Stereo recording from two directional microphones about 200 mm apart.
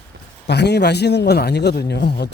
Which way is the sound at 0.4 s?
55° left (ahead or behind).